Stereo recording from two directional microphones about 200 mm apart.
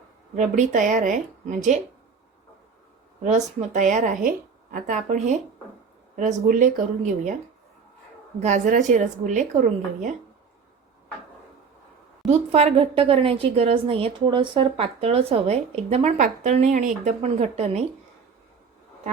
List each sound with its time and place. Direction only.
0.3 s a woman's voice: 35° right (ahead or behind)
3.2 s a woman's voice: 35° right (ahead or behind)
8.4 s a woman's voice: 40° right (ahead or behind)
12.3 s a woman's voice: 30° right (ahead or behind)